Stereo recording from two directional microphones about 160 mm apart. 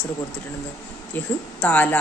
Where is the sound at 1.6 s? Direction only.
10° left (ahead or behind).